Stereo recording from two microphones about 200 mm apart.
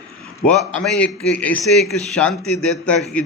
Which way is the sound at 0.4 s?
5° left (ahead or behind).